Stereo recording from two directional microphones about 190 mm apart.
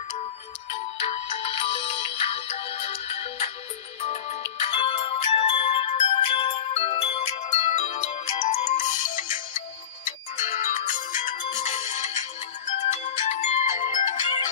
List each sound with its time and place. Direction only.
0.7 s music: 30° left (ahead or behind)
12.7 s ringtone: 40° left (ahead or behind)